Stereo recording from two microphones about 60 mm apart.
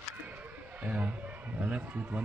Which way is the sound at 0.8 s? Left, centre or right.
Right.